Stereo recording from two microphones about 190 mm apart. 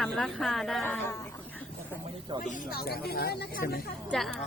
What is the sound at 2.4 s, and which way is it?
Speech, 50° left (ahead or behind).